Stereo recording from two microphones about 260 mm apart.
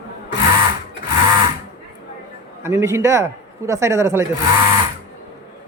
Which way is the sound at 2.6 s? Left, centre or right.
Centre.